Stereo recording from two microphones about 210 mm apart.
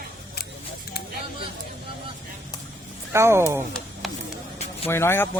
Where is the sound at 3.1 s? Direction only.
10° right (ahead or behind).